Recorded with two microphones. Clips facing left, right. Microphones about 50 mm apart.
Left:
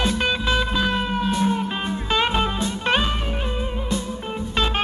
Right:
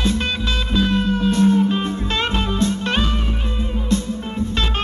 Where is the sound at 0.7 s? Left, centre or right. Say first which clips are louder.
Right 3 dB; centre.